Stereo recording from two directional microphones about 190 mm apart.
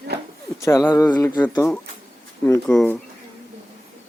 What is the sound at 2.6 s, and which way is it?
Speech, 5° left (ahead or behind).